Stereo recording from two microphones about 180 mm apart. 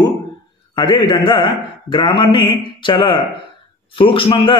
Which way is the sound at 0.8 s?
25° left (ahead or behind).